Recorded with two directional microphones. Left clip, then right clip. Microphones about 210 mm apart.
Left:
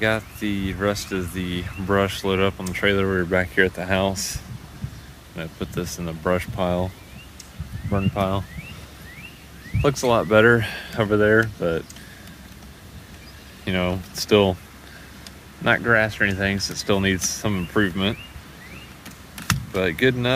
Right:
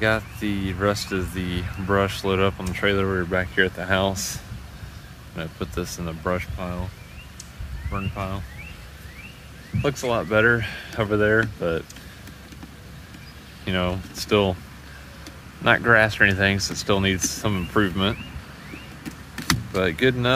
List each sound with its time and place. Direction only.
0.0 s speech: centre (ahead or behind)
6.2 s speech: 15° left (ahead or behind)
6.5 s speech: 35° left (ahead or behind)
8.1 s speech: 30° left (ahead or behind)
9.8 s speech: 15° left (ahead or behind)
13.7 s speech: 5° left (ahead or behind)
15.6 s speech: 5° right (ahead or behind)
19.7 s speech: centre (ahead or behind)